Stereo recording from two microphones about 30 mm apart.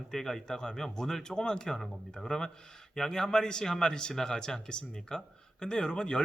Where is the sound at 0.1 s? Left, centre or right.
Centre.